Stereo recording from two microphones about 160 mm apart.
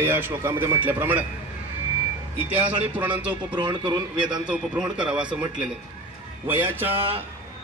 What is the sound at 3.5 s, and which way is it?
Speech, 30° right (ahead or behind).